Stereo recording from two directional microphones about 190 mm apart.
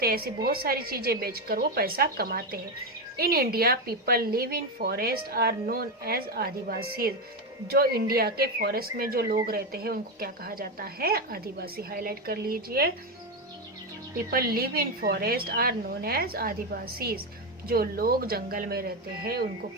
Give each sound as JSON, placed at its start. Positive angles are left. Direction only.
{"t": 0.0, "sound": "speech", "side_deg": -55}
{"t": 14.3, "sound": "speech", "side_deg": -55}